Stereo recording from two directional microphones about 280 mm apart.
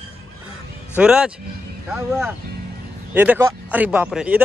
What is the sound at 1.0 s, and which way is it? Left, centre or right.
Speech, centre.